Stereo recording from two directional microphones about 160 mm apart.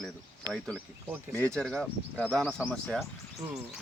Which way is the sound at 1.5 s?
5° left (ahead or behind).